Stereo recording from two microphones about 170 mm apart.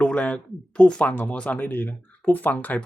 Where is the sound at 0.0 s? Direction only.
5° left (ahead or behind).